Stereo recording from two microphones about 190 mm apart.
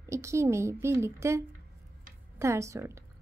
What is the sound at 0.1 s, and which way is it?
A woman's voice, 15° right (ahead or behind).